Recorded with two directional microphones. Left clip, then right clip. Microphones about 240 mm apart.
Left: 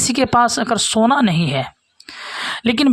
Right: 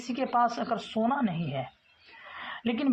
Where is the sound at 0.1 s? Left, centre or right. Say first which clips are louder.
Left 11 dB; left.